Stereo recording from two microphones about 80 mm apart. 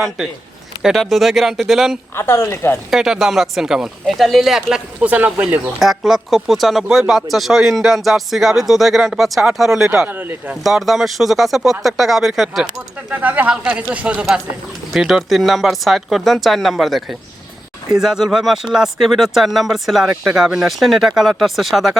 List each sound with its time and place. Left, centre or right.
0.8 s speech: centre
2.1 s a woman's voice: left
2.9 s speech: centre
4.9 s speech: centre
5.8 s speech: centre
10.1 s speech: right
10.6 s speech: centre
13.1 s speech: right
14.9 s speech: centre